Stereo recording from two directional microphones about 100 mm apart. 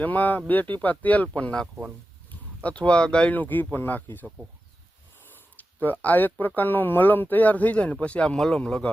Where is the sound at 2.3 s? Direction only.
15° left (ahead or behind).